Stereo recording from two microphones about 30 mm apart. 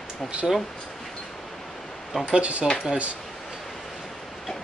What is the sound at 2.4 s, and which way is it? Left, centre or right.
Speech, right.